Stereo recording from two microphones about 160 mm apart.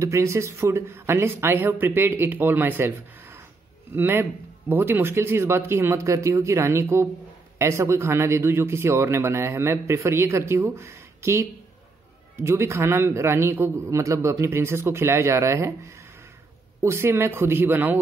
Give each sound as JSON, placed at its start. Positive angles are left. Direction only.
{"t": 0.0, "sound": "a man's voice", "side_deg": -20}